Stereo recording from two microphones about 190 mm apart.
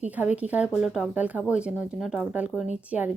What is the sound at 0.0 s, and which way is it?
A woman's voice, 10° right (ahead or behind).